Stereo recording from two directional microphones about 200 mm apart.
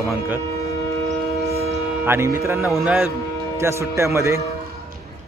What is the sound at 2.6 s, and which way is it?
Speech, 5° right (ahead or behind).